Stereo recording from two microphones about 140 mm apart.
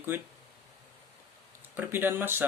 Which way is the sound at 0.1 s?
15° right (ahead or behind).